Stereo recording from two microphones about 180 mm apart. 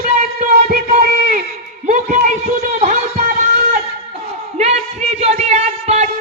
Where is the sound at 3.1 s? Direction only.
50° right (ahead or behind).